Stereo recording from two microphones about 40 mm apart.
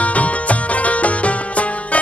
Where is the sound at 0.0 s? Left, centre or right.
Left.